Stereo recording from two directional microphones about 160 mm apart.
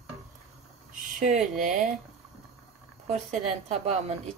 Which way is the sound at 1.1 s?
50° right (ahead or behind).